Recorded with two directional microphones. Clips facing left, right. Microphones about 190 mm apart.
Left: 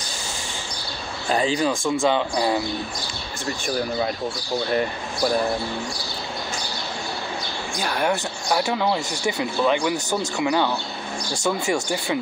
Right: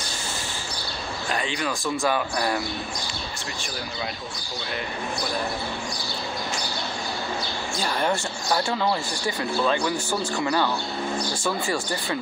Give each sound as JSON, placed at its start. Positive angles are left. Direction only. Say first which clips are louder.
{"t": 1.3, "sound": "speech", "louder": "left 8 dB", "side_deg": 35}
{"t": 7.8, "sound": "speech", "louder": "left 2 dB", "side_deg": 5}
{"t": 11.7, "sound": "speech", "louder": "left 4 dB", "side_deg": 15}